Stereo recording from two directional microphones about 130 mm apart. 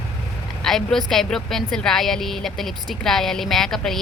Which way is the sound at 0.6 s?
5° left (ahead or behind).